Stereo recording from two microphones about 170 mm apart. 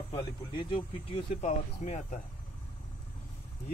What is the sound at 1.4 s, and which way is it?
Speech, 45° left (ahead or behind).